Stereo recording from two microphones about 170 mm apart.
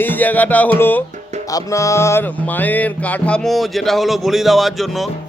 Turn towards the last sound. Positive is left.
turn(degrees=0)  # may be behind; listen again after turning